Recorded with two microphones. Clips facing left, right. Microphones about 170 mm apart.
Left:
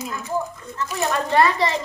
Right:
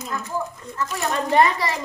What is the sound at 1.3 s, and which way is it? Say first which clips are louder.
Speech: right 1 dB; 20° right (ahead or behind).